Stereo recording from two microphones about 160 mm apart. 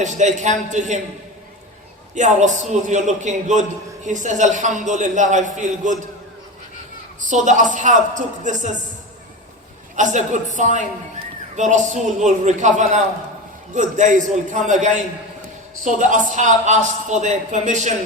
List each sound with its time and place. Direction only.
0.0 s a man's voice: 50° right (ahead or behind)
2.1 s a man's voice: 50° right (ahead or behind)
7.2 s a man's voice: 50° right (ahead or behind)
9.9 s a man's voice: 50° right (ahead or behind)